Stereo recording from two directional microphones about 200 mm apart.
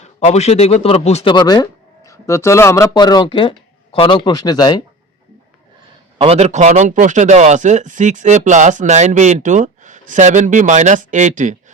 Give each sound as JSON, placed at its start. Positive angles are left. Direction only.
{"t": 0.0, "sound": "speech", "side_deg": 30}
{"t": 6.1, "sound": "speech", "side_deg": -30}